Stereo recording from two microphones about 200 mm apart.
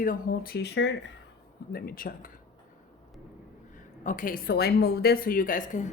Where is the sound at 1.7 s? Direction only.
45° left (ahead or behind).